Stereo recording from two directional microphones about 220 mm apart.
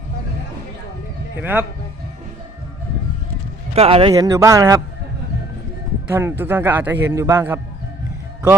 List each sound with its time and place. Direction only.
1.4 s a man's voice: 10° right (ahead or behind)
3.8 s a man's voice: 25° right (ahead or behind)
6.1 s a man's voice: 10° right (ahead or behind)